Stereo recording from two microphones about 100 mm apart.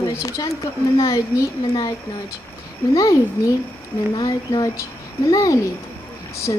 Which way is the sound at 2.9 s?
35° left (ahead or behind).